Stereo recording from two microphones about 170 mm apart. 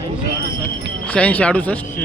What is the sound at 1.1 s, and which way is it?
Speech, 10° left (ahead or behind).